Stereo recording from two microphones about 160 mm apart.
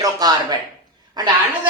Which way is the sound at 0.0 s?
25° right (ahead or behind).